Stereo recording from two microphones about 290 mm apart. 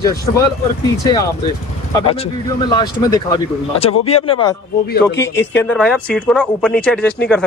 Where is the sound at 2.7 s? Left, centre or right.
Centre.